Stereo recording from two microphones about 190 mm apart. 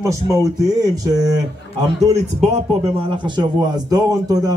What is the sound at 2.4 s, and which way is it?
Speech, 35° right (ahead or behind).